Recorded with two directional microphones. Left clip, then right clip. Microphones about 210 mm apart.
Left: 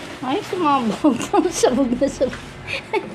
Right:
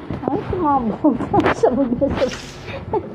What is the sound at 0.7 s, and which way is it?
A woman's voice, 25° left (ahead or behind).